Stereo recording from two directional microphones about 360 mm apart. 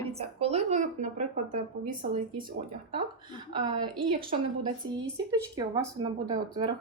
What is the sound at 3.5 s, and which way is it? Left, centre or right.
Speech, centre.